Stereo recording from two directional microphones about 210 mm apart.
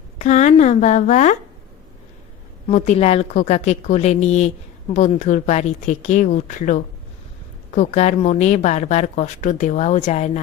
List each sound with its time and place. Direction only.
0.2 s a woman's voice: 35° left (ahead or behind)
2.6 s a woman's voice: 35° left (ahead or behind)